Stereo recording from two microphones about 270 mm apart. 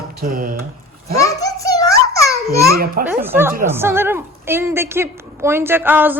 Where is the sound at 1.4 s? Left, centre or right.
Centre.